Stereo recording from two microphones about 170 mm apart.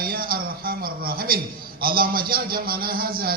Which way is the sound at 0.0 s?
60° right (ahead or behind).